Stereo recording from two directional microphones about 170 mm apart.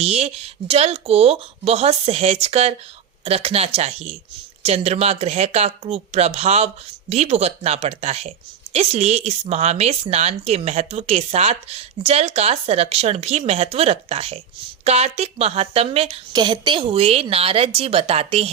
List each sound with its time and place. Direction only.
0.0 s speech: 40° right (ahead or behind)